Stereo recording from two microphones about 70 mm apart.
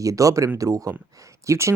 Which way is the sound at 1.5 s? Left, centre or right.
Right.